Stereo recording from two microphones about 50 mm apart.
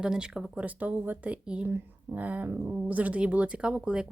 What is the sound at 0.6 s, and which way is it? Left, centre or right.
Speech, right.